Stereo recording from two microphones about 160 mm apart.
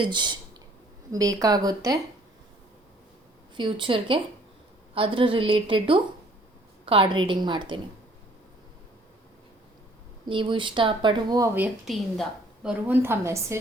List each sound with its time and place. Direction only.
0.0 s a woman's voice: 30° right (ahead or behind)
3.6 s a woman's voice: 30° right (ahead or behind)
10.2 s speech: 30° right (ahead or behind); by 11.7 s 15° right (ahead or behind)
11.9 s a woman's voice: centre (ahead or behind)
12.9 s a woman's voice: 15° right (ahead or behind)